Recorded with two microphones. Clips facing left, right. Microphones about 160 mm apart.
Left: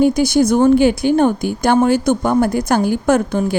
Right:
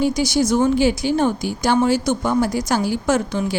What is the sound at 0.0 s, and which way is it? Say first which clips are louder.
A woman's voice: left 5 dB; 55° left (ahead or behind).